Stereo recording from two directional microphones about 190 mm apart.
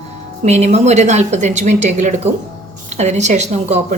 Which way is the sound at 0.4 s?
35° right (ahead or behind).